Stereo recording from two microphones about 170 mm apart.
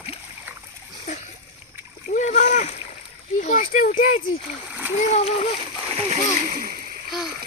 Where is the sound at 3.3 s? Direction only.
50° left (ahead or behind).